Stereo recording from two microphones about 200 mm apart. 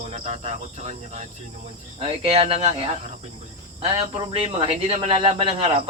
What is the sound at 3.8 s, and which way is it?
Speech, 30° right (ahead or behind).